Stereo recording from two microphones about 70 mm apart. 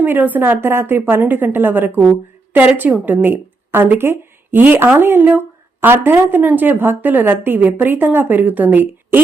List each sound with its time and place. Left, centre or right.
0.0 s a woman's voice: right